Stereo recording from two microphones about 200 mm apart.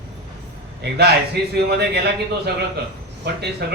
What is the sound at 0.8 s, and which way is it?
A man's voice, 55° right (ahead or behind).